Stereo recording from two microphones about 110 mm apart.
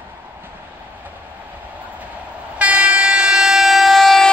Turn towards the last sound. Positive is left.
turn(degrees=0)  # may be behind; listen again after turning